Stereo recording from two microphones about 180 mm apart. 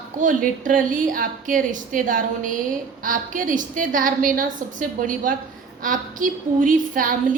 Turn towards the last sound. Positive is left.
turn(degrees=-50)  # may be behind; listen again after turning